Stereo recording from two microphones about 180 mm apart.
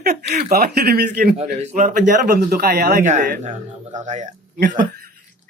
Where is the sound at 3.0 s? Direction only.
40° right (ahead or behind).